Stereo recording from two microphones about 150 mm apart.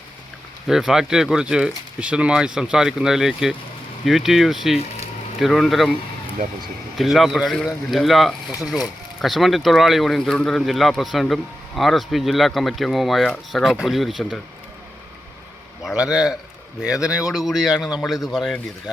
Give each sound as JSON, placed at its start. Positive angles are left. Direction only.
{"t": 0.7, "sound": "speech", "side_deg": 0}
{"t": 6.9, "sound": "speech", "side_deg": 0}
{"t": 15.8, "sound": "speech", "side_deg": -5}